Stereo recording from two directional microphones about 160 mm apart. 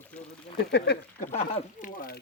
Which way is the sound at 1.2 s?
50° left (ahead or behind).